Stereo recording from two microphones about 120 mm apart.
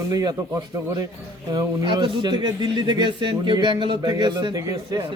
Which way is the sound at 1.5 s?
40° right (ahead or behind).